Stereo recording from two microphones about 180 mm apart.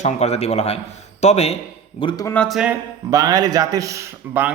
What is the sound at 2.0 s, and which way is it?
Speech, 25° left (ahead or behind).